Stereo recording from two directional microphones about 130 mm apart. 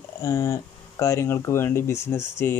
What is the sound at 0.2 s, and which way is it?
Speech, 20° left (ahead or behind).